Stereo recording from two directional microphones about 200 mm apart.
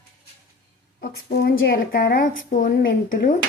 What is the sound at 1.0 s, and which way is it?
A woman's voice, 55° left (ahead or behind).